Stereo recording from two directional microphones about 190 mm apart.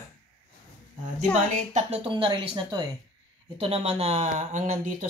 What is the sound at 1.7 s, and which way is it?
Speech, 30° right (ahead or behind).